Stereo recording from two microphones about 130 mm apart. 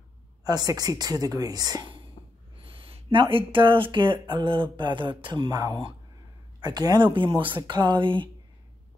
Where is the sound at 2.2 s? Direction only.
50° left (ahead or behind).